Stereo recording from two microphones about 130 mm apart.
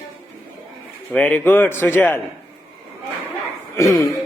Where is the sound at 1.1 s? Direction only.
15° left (ahead or behind).